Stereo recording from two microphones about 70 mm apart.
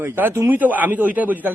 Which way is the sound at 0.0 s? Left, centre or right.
Right.